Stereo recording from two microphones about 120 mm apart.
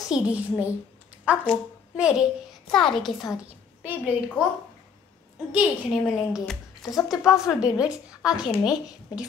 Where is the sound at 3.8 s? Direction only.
15° right (ahead or behind).